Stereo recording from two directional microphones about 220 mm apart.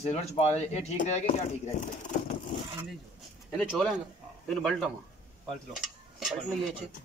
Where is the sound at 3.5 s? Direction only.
5° left (ahead or behind).